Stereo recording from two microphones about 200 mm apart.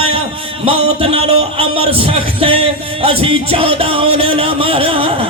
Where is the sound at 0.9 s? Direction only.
30° right (ahead or behind).